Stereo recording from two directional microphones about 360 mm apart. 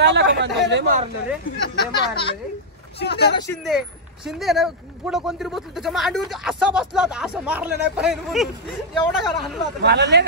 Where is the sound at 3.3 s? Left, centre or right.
Centre.